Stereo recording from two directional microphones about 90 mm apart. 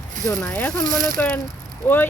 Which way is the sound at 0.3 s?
15° left (ahead or behind).